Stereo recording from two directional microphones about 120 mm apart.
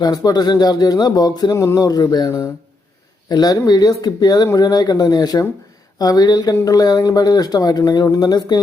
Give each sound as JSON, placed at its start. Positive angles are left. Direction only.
{"t": 0.0, "sound": "speech", "side_deg": 30}